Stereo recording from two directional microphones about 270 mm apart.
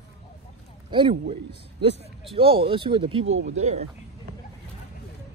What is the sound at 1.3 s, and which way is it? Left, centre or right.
Speech, right.